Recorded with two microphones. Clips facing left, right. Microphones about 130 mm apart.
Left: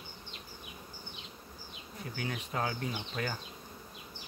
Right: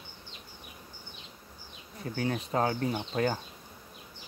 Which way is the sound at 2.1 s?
35° right (ahead or behind).